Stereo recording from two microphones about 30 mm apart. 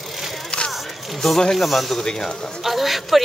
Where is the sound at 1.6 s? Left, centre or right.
Centre.